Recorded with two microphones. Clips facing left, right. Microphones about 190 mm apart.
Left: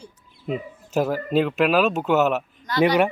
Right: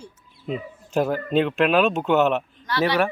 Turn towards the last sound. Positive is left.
turn(degrees=20)  # may be behind; listen again after turning